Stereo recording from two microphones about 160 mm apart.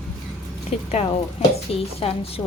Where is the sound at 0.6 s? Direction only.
40° left (ahead or behind).